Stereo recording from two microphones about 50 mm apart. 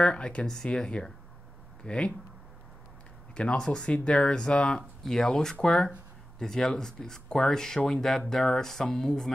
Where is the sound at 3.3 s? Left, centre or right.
Centre.